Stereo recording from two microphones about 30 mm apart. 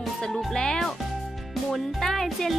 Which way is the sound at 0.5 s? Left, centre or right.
Left.